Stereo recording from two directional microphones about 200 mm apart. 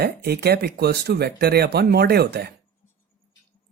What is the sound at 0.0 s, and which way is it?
Speech, 55° right (ahead or behind).